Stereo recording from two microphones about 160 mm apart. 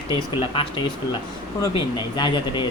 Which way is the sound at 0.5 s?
30° left (ahead or behind).